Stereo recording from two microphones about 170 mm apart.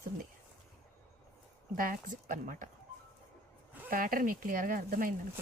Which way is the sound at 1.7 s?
55° right (ahead or behind).